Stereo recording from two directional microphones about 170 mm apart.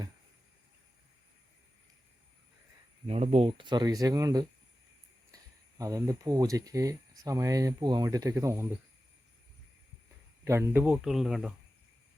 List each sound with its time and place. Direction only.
3.1 s speech: 40° right (ahead or behind); by 8.6 s 20° right (ahead or behind)
10.4 s speech: 15° right (ahead or behind)